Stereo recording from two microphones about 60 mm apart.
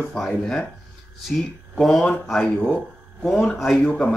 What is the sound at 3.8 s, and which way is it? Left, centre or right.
Speech, left.